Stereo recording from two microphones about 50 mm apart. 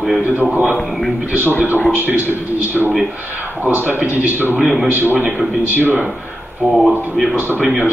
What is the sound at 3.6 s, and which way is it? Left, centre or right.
A man's voice, right.